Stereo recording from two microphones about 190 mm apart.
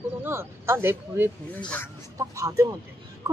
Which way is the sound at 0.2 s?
15° right (ahead or behind).